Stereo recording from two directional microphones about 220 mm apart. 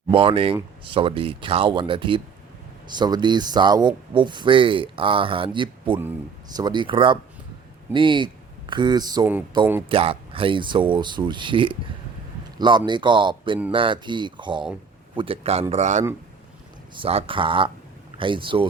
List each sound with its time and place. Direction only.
0.1 s speech: 25° right (ahead or behind)
9.9 s a man's voice: 25° right (ahead or behind)